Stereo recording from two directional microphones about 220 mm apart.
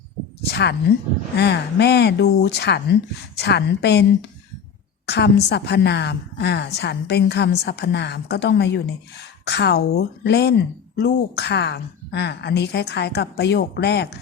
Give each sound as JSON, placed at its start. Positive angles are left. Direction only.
{"t": 0.5, "sound": "a woman's voice", "side_deg": 50}